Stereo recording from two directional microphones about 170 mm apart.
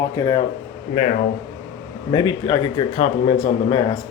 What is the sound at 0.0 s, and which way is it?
Speech, 20° left (ahead or behind).